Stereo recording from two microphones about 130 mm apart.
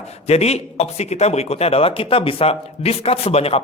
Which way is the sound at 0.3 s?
55° left (ahead or behind).